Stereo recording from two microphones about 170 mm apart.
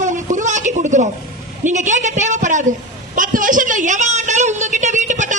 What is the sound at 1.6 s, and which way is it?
A woman's voice, 45° right (ahead or behind).